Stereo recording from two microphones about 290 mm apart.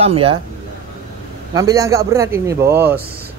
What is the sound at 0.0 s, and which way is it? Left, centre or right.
Speech, centre.